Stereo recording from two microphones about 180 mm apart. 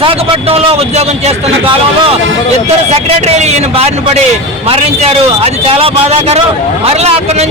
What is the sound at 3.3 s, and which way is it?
A man's voice, 35° right (ahead or behind).